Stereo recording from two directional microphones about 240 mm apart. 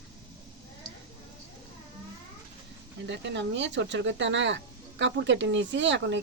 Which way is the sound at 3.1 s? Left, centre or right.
Right.